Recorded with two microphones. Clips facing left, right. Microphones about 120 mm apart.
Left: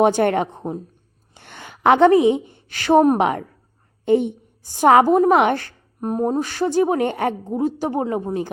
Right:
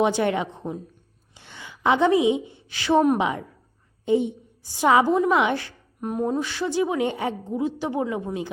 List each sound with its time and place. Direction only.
0.0 s a woman's voice: 50° left (ahead or behind)
1.3 s a sound: 55° left (ahead or behind)
3.2 s a woman's voice: 55° left (ahead or behind); by 8.4 s 40° left (ahead or behind)